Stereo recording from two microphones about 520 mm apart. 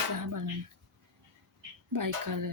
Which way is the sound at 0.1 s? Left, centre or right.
Right.